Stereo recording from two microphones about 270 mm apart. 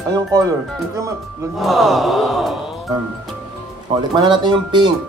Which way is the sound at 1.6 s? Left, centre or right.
Centre.